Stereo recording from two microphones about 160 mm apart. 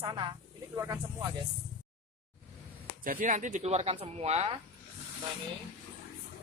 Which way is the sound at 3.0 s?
60° right (ahead or behind).